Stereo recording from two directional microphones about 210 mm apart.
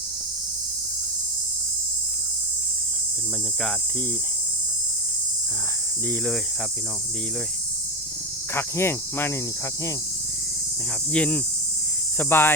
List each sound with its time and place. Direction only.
6.1 s speech: 5° left (ahead or behind)
8.5 s cricket: 10° left (ahead or behind)
11.1 s cricket: 5° left (ahead or behind)